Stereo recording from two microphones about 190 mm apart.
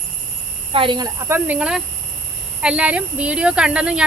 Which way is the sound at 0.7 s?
25° right (ahead or behind).